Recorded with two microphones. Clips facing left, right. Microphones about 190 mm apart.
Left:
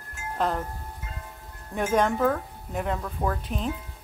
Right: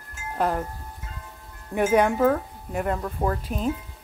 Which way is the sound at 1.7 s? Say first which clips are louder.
Right 4 dB; 10° right (ahead or behind).